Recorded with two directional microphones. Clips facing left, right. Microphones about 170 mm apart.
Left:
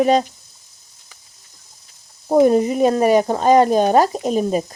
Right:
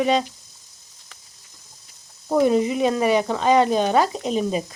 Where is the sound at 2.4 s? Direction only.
45° left (ahead or behind).